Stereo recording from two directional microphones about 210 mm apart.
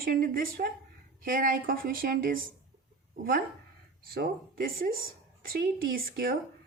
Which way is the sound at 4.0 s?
45° right (ahead or behind).